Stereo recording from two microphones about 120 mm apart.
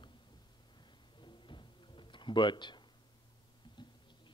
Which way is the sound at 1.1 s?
40° left (ahead or behind).